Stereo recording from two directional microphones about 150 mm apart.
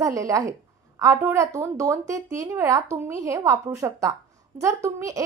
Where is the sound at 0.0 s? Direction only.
20° right (ahead or behind).